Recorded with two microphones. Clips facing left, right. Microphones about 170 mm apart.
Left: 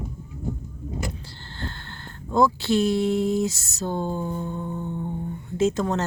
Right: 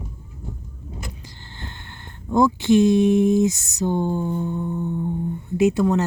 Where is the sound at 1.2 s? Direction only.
15° right (ahead or behind).